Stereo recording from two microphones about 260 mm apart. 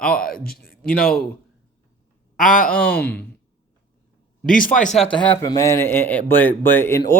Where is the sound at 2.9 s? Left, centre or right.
Centre.